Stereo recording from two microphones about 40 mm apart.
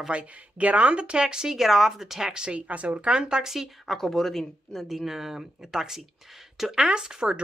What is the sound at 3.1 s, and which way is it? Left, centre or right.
Speech, right.